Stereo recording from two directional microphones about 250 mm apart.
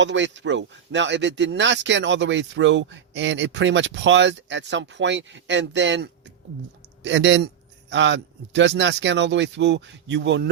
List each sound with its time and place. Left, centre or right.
0.0 s speech: right